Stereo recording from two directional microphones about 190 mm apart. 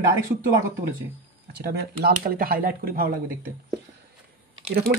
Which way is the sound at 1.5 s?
55° right (ahead or behind).